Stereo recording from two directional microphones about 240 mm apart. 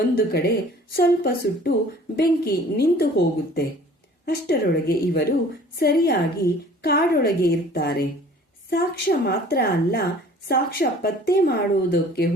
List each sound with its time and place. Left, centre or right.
0.2 s a woman's voice: left